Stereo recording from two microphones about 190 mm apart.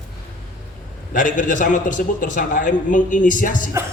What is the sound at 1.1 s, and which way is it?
A man's voice, 45° left (ahead or behind).